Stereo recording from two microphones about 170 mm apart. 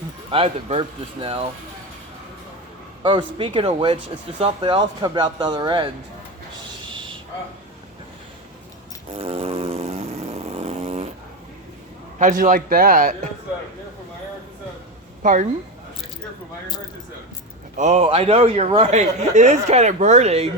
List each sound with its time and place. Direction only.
0.3 s speech: 35° right (ahead or behind)
3.0 s speech: 30° right (ahead or behind)
9.1 s chainsaw: 35° right (ahead or behind)
12.2 s speech: 50° right (ahead or behind)
15.2 s speech: 50° right (ahead or behind)
17.7 s speech: 40° right (ahead or behind)